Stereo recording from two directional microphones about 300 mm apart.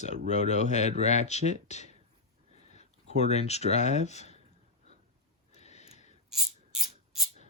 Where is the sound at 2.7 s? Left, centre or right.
Left.